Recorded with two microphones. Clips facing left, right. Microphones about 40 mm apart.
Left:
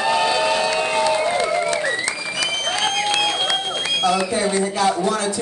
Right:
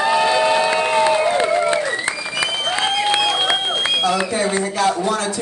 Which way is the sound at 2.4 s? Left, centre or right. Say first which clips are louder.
Right 1 dB; right.